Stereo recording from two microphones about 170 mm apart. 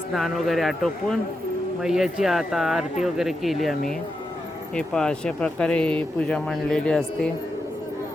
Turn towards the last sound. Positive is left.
turn(degrees=5)  # may be behind; listen again after turning